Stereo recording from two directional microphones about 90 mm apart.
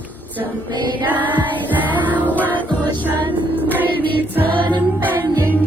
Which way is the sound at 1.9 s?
20° right (ahead or behind).